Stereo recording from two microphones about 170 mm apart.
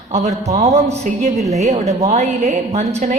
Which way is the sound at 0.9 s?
40° right (ahead or behind).